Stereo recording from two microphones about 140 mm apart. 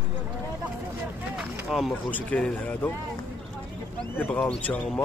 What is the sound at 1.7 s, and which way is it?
Speech, centre (ahead or behind).